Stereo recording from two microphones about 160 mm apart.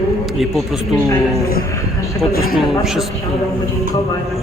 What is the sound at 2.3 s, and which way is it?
Speech, 70° left (ahead or behind).